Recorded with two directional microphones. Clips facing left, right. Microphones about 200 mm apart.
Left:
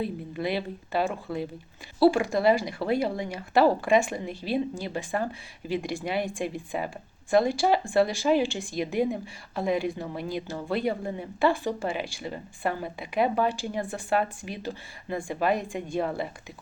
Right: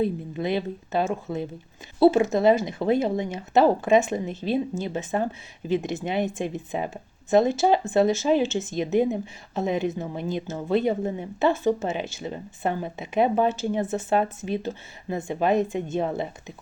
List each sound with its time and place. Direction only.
0.4 s speech: 20° right (ahead or behind)